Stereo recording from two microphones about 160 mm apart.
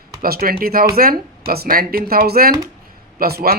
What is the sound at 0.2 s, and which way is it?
Speech, 70° right (ahead or behind).